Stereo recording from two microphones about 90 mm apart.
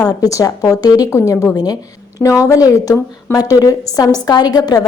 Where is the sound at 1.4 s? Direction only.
45° left (ahead or behind).